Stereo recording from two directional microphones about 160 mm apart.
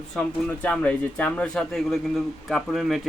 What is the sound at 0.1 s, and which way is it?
Speech, 5° left (ahead or behind).